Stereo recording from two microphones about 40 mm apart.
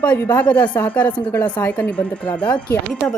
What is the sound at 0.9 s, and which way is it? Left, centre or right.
Speech, left.